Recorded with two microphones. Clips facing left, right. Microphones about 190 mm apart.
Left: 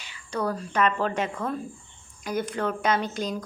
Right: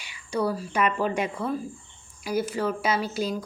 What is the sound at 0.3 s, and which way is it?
Speech, 5° right (ahead or behind).